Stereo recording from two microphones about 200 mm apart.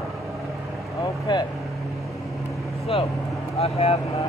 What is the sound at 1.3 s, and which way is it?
Speech, 20° left (ahead or behind).